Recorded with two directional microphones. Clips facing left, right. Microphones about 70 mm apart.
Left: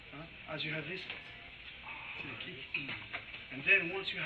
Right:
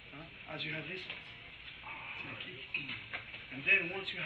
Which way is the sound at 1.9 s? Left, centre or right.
Centre.